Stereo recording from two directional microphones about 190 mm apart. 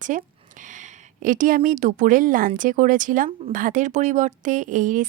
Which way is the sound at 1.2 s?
45° right (ahead or behind).